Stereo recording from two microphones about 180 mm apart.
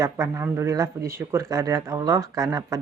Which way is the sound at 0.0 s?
15° right (ahead or behind).